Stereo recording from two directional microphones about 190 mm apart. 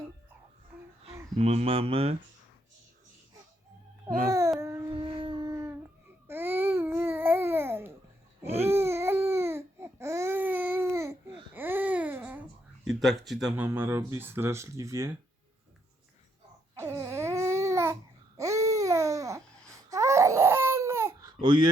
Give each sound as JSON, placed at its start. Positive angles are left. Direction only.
{"t": 1.4, "sound": "speech", "side_deg": -35}
{"t": 4.3, "sound": "speech", "side_deg": -15}
{"t": 4.9, "sound": "a sound", "side_deg": -25}
{"t": 6.2, "sound": "babbling", "side_deg": -10}
{"t": 8.4, "sound": "a sound", "side_deg": -35}
{"t": 8.7, "sound": "a sound", "side_deg": -15}
{"t": 11.5, "sound": "babbling", "side_deg": -10}
{"t": 12.9, "sound": "speech", "side_deg": 0}
{"t": 16.7, "sound": "babbling", "side_deg": -15}
{"t": 19.9, "sound": "baby cry", "side_deg": -15}